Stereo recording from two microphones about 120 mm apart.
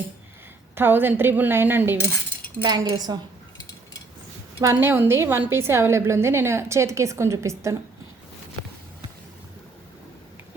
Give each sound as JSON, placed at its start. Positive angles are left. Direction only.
{"t": 0.8, "sound": "a woman's voice", "side_deg": -15}
{"t": 2.6, "sound": "a woman's voice", "side_deg": -35}
{"t": 4.6, "sound": "a woman's voice", "side_deg": -25}